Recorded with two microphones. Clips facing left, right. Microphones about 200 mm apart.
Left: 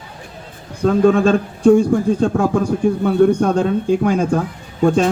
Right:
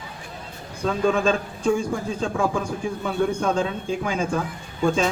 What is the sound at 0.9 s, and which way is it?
A man's voice, 60° left (ahead or behind).